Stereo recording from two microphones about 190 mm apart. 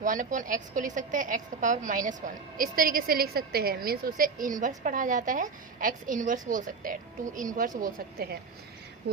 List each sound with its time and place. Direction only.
0.0 s a woman's voice: 45° right (ahead or behind)